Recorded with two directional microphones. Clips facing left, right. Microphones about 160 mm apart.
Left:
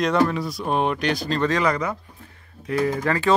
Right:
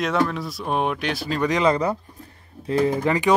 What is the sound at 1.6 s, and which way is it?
Speech, 30° right (ahead or behind).